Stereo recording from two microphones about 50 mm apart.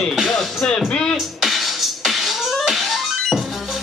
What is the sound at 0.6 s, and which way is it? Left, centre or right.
Music, centre.